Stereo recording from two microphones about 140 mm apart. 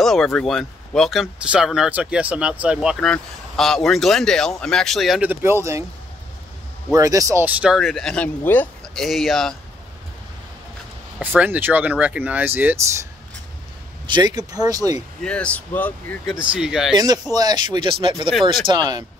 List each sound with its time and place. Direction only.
0.0 s speech: centre (ahead or behind)
5.3 s speech: 15° right (ahead or behind)
6.9 s speech: 25° right (ahead or behind)
7.4 s speech: 5° right (ahead or behind)
11.1 s speech: 10° right (ahead or behind)
14.0 s speech: 30° right (ahead or behind)
15.2 s speech: 10° left (ahead or behind)
16.3 s speech: 5° right (ahead or behind)
16.9 s speech: 30° right (ahead or behind)